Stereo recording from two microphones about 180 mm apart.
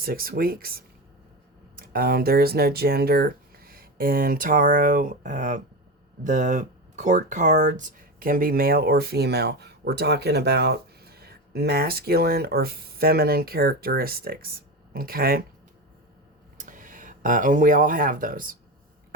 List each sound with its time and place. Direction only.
0.0 s speech: 55° right (ahead or behind)
16.6 s speech: 45° right (ahead or behind)